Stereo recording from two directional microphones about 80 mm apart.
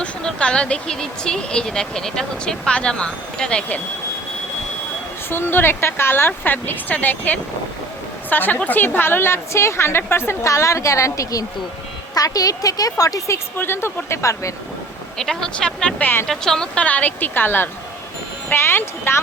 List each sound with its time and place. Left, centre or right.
0.0 s speech: centre
5.3 s a woman's voice: left
13.6 s a woman's voice: left
15.2 s speech: centre
16.0 s speech: left
16.2 s speech: centre; by 19.2 s left